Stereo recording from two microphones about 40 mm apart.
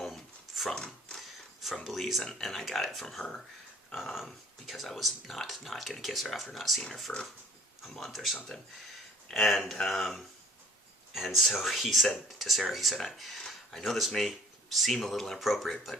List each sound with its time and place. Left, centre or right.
0.1 s a sound: centre
0.8 s a sound: left
1.6 s speech: centre
7.1 s speech: left
7.9 s speech: centre
11.1 s speech: centre